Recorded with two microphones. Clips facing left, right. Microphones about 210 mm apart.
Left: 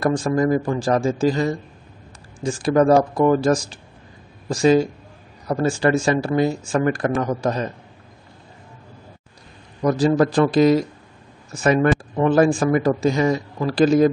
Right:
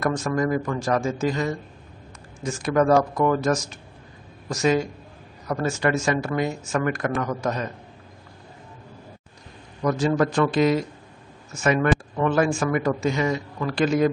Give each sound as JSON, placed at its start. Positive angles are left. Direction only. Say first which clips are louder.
{"t": 0.0, "sound": "speech", "louder": "left 4 dB", "side_deg": 30}
{"t": 9.8, "sound": "speech", "louder": "left 4 dB", "side_deg": 35}